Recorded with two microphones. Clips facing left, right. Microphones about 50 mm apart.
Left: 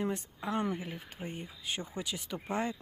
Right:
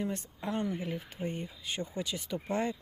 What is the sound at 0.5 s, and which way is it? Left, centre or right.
Speech, left.